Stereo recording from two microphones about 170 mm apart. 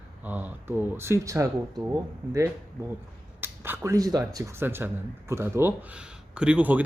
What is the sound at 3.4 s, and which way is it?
Speech, 15° right (ahead or behind).